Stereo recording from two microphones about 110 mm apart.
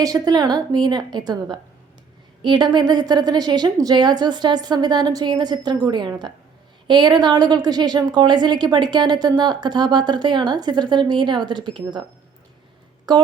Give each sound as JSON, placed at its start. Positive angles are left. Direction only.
{"t": 0.0, "sound": "a woman's voice", "side_deg": -35}
{"t": 13.1, "sound": "a woman's voice", "side_deg": -40}